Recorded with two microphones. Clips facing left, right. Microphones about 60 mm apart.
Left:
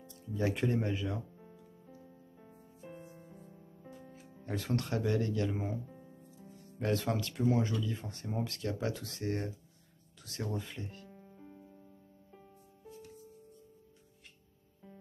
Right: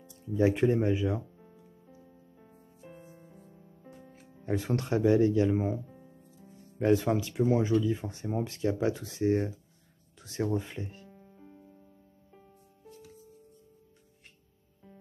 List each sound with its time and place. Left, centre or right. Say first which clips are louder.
0.1 s speech: right 8 dB; centre
1.3 s music: even; centre
4.5 s speech: right 5 dB; centre
5.9 s music: even; centre
6.5 s speech: right 8 dB; centre
11.1 s music: even; centre